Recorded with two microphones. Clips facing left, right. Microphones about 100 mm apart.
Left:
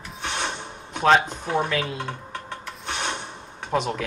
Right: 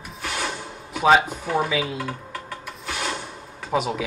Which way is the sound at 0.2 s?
25° left (ahead or behind).